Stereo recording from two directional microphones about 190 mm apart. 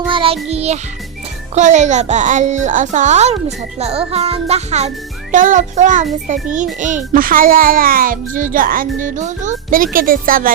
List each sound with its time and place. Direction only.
0.1 s music: 30° right (ahead or behind)
0.5 s a child's voice: 35° right (ahead or behind)